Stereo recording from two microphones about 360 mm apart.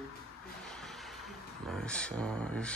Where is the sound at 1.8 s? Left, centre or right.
Centre.